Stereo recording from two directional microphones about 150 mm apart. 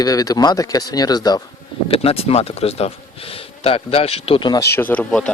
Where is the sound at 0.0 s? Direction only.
25° left (ahead or behind).